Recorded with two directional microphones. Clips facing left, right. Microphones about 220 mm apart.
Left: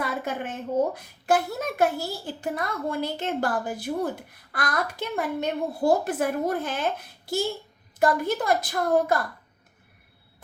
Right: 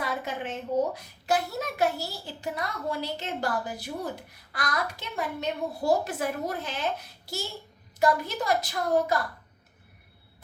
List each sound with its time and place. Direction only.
0.0 s a woman's voice: 50° left (ahead or behind)